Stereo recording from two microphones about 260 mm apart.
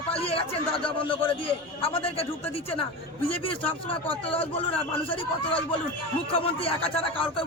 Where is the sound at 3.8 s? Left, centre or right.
Left.